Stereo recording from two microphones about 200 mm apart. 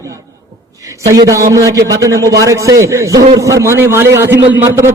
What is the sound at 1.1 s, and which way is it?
A man's voice, 15° right (ahead or behind).